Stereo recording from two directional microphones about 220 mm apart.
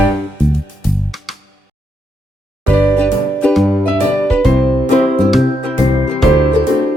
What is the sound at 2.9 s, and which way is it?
Music, 5° left (ahead or behind).